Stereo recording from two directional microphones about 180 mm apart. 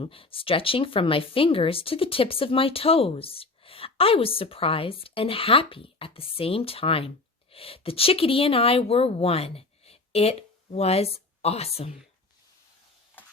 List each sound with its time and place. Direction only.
0.0 s a woman's voice: 30° left (ahead or behind)